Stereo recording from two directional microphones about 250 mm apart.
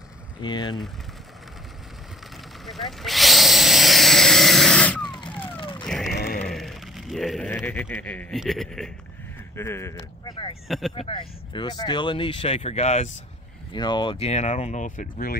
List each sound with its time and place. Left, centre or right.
0.4 s speech: centre
2.6 s drill: centre
5.0 s vehicle: centre
5.3 s vehicle: centre
5.6 s vehicle: centre
5.9 s a sound: centre
6.1 s a sound: left
6.4 s speech: centre; by 15.3 s left